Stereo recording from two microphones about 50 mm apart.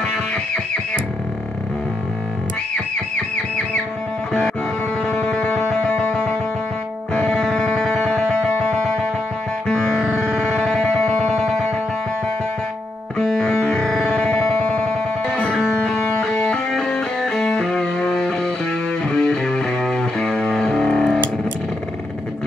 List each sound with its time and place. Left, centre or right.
5.0 s music: left
7.2 s music: centre
13.2 s music: centre
17.2 s music: centre